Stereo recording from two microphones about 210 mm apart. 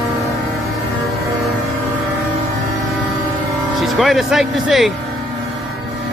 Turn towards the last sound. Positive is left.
turn(degrees=0)  # may be behind; listen again after turning